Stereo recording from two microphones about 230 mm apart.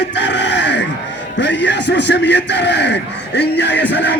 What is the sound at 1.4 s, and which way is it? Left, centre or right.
A man's voice, left.